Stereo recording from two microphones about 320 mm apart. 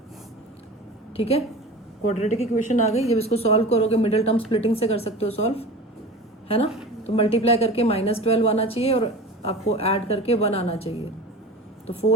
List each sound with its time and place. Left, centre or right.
1.1 s a woman's voice: centre
7.1 s a woman's voice: centre